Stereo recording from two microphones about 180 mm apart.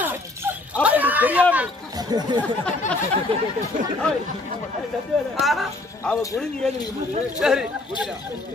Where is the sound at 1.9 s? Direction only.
20° right (ahead or behind).